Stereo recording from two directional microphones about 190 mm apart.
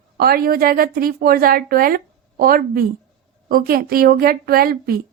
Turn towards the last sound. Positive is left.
turn(degrees=-50)  # may be behind; listen again after turning